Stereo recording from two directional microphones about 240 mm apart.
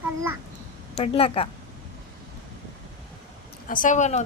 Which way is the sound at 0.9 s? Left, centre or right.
Left.